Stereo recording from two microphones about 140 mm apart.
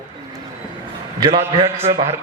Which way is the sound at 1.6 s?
15° right (ahead or behind).